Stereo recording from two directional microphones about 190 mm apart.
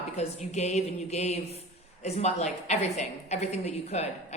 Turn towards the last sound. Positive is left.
turn(degrees=35)  # may be behind; listen again after turning